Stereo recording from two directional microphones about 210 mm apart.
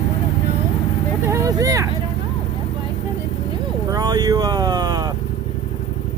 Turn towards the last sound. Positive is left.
turn(degrees=-20)  # may be behind; listen again after turning